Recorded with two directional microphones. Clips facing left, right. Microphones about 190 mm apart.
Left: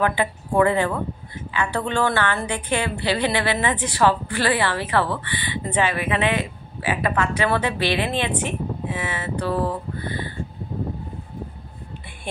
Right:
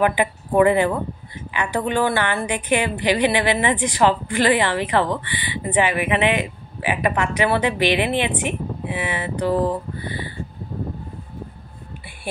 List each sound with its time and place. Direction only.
0.0 s a woman's voice: 15° right (ahead or behind)